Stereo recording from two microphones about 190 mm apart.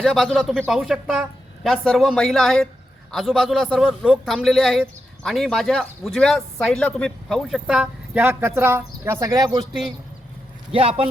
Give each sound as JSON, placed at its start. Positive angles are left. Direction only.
{"t": 0.0, "sound": "a man's voice", "side_deg": 0}
{"t": 10.7, "sound": "a man's voice", "side_deg": -30}